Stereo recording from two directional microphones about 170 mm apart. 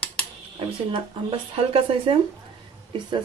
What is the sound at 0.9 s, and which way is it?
A woman's voice, 35° right (ahead or behind).